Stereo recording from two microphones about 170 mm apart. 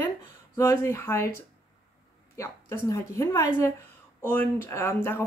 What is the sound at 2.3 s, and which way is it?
Speech, 15° left (ahead or behind).